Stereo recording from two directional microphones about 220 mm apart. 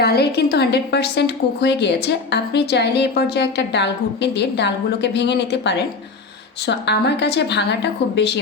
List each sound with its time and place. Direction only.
0.0 s a woman's voice: 45° left (ahead or behind)